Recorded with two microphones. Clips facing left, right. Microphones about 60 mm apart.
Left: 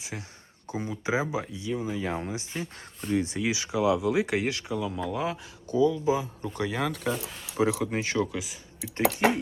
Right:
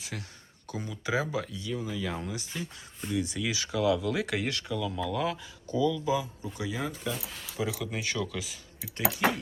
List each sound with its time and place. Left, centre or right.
0.0 s speech: left
5.7 s speech: left
6.4 s speech: left
7.5 s speech: left